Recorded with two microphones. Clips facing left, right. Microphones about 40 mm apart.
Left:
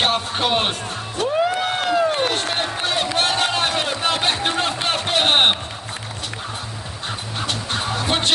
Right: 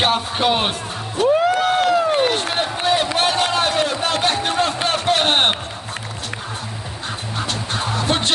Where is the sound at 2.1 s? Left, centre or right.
Centre.